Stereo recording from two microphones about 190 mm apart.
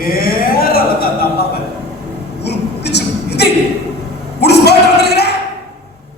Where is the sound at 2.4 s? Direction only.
60° left (ahead or behind).